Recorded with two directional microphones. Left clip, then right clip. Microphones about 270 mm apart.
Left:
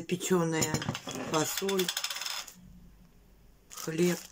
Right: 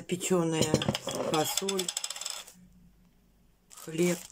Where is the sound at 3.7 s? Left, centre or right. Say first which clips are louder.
Even; centre.